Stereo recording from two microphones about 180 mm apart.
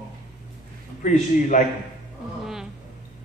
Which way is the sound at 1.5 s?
45° left (ahead or behind).